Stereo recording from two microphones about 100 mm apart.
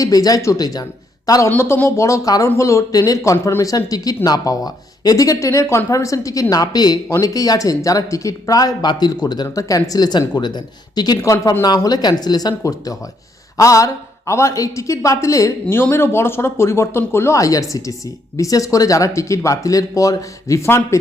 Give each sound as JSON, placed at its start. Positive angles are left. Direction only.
{"t": 0.0, "sound": "speech", "side_deg": 40}
{"t": 1.3, "sound": "speech", "side_deg": 30}
{"t": 11.2, "sound": "speech", "side_deg": 30}